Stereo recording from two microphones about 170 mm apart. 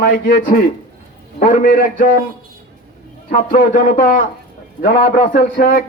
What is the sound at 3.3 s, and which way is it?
Speech, 50° left (ahead or behind).